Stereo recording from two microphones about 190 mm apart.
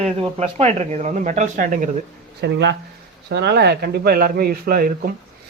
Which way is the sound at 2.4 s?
65° right (ahead or behind).